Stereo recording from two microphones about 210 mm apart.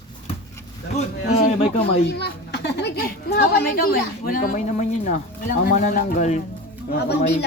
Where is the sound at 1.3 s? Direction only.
45° left (ahead or behind).